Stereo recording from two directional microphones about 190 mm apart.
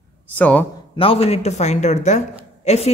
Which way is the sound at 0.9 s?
30° left (ahead or behind).